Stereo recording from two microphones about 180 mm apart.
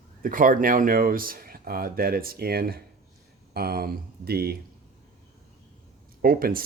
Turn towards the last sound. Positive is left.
turn(degrees=-55)  # may be behind; listen again after turning